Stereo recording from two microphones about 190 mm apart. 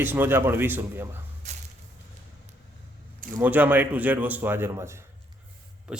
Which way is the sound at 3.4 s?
10° right (ahead or behind).